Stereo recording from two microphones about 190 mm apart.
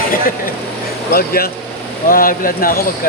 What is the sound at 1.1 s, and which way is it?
Speech, 50° left (ahead or behind).